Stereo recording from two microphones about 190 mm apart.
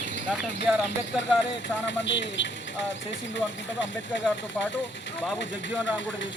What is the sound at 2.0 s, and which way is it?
Speech, 70° left (ahead or behind).